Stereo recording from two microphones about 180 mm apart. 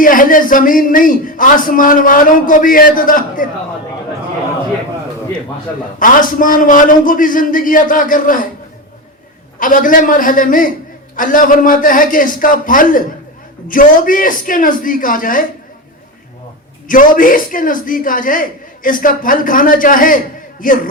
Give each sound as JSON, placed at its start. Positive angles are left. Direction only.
{"t": 0.0, "sound": "a man's voice", "side_deg": 50}
{"t": 6.0, "sound": "a man's voice", "side_deg": 50}
{"t": 9.6, "sound": "a man's voice", "side_deg": 50}
{"t": 16.9, "sound": "a man's voice", "side_deg": 50}